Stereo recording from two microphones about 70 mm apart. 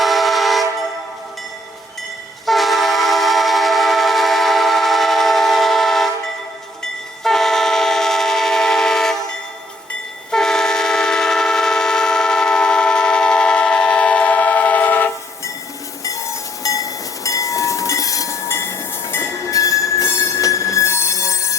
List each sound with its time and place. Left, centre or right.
0.0 s train: centre
2.5 s train: centre
10.3 s vehicle horn: centre
16.0 s train: left
18.4 s train: left
19.2 s train: left